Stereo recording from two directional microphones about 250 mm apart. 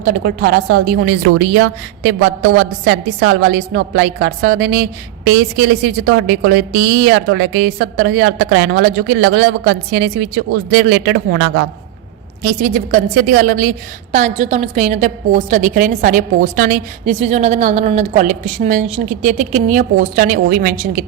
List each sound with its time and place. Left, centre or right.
0.0 s a woman's voice: right
12.4 s a woman's voice: right